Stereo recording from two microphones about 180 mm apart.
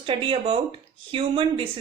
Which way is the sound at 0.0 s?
30° right (ahead or behind).